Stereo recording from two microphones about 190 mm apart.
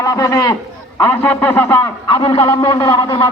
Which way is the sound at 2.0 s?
30° left (ahead or behind).